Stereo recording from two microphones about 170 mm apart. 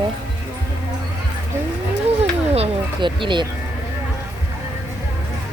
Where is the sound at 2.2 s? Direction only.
35° right (ahead or behind).